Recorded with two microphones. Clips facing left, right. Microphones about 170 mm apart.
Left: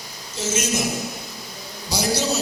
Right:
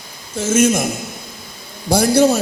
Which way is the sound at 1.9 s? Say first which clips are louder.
Right 10 dB; 55° right (ahead or behind).